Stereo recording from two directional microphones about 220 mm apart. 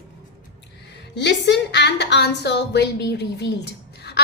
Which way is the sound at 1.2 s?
50° left (ahead or behind).